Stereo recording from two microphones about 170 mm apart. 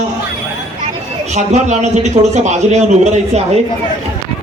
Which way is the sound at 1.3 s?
40° right (ahead or behind).